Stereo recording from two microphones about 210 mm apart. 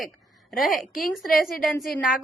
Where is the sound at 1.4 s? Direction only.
45° left (ahead or behind).